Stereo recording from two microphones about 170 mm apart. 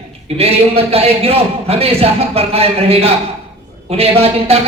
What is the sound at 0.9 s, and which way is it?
A woman's voice, 35° right (ahead or behind).